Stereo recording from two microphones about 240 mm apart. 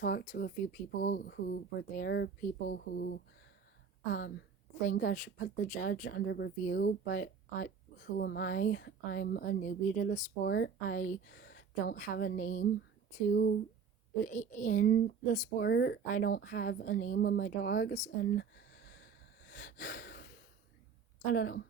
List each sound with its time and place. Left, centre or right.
0.0 s speech: left
4.9 s speech: left
16.0 s speech: left
19.5 s gasp: left
21.3 s speech: left